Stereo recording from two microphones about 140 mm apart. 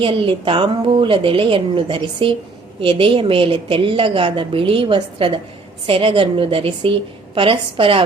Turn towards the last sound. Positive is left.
turn(degrees=-40)  # may be behind; listen again after turning